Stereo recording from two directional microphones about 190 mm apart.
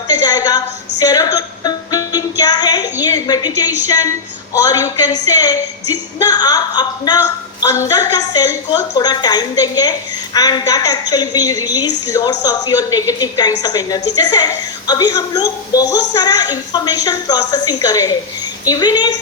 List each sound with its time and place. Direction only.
0.1 s music: 20° left (ahead or behind)
2.4 s a sound: 20° left (ahead or behind)
3.8 s a woman's voice: 20° left (ahead or behind)